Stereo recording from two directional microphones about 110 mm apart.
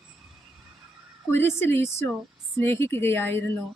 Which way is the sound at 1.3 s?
20° left (ahead or behind).